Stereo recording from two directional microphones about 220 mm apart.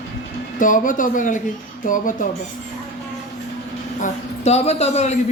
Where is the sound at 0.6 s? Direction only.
35° left (ahead or behind).